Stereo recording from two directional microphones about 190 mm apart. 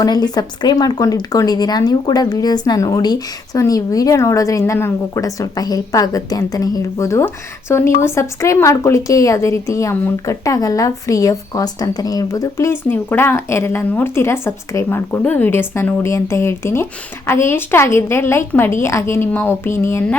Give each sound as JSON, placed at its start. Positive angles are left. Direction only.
{"t": 0.0, "sound": "a woman's voice", "side_deg": 20}